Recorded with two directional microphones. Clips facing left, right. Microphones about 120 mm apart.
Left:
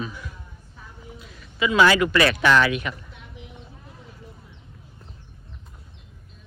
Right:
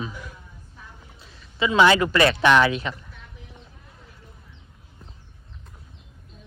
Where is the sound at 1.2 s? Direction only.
30° right (ahead or behind).